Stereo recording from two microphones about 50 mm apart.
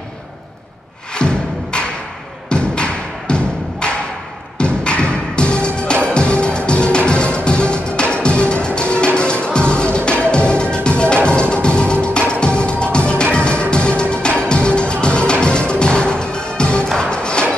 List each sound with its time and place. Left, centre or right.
1.1 s music: centre